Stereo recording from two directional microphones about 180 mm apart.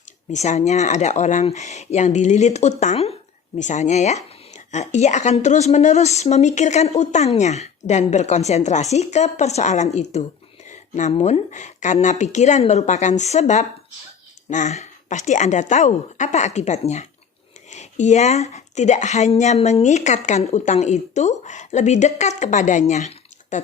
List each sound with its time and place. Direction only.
0.3 s speech: 40° left (ahead or behind)
10.7 s a sound: 45° left (ahead or behind)
11.1 s speech: 35° left (ahead or behind)